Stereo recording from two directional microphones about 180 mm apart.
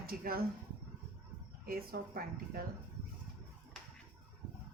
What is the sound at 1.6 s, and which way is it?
Speech, 55° right (ahead or behind).